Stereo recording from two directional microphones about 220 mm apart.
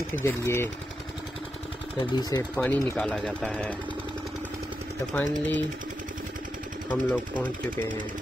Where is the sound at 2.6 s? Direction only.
5° left (ahead or behind).